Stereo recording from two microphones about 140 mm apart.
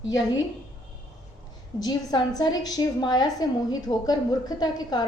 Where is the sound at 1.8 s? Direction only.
30° left (ahead or behind).